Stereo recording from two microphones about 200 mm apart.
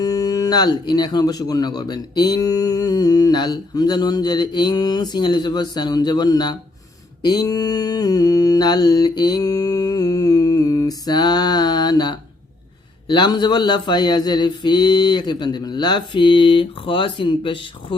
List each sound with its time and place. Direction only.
0.0 s speech: 20° left (ahead or behind)